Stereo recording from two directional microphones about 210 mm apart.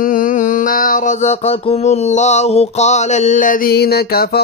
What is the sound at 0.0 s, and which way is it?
Mantra, 40° left (ahead or behind).